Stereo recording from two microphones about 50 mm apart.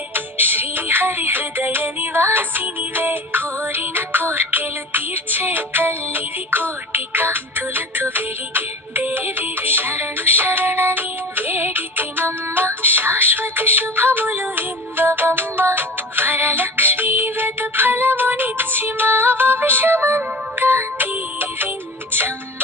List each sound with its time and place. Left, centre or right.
0.1 s music: right